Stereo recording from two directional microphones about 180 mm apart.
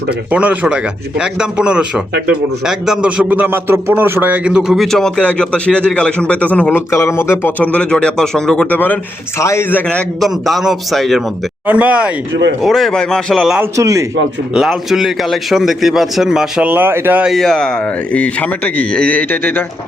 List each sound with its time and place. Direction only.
0.3 s a man's voice: 10° right (ahead or behind)
13.7 s speech: 20° right (ahead or behind)
14.5 s a man's voice: 5° right (ahead or behind)